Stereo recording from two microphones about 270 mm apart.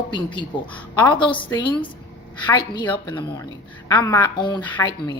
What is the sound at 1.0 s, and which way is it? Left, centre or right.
A woman's voice, centre.